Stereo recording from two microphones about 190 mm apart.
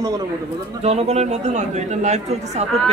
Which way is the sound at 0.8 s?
35° right (ahead or behind).